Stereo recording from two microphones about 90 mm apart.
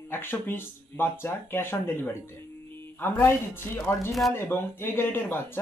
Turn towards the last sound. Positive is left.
turn(degrees=25)  # may be behind; listen again after turning